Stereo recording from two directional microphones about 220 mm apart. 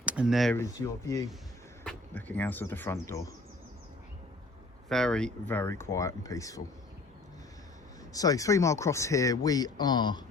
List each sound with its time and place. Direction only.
0.0 s speech: 5° right (ahead or behind)
0.5 s speech: 15° left (ahead or behind)
4.9 s speech: centre (ahead or behind)
8.1 s speech: 15° left (ahead or behind)